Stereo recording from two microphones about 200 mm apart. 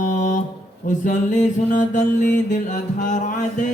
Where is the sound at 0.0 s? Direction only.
40° left (ahead or behind).